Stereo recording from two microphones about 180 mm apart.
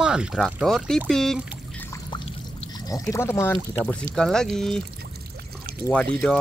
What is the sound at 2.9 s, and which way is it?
Speech, 15° left (ahead or behind).